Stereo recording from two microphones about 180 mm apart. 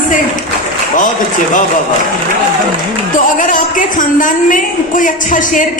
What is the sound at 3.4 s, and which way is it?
A woman's voice, 45° left (ahead or behind).